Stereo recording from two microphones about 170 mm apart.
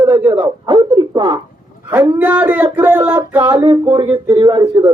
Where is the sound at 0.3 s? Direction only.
25° right (ahead or behind).